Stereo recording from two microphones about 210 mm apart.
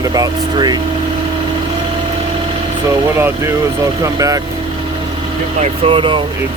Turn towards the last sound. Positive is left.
turn(degrees=-25)  # may be behind; listen again after turning